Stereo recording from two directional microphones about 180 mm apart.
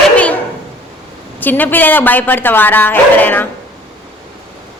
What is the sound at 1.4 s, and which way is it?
A woman's voice, 10° left (ahead or behind).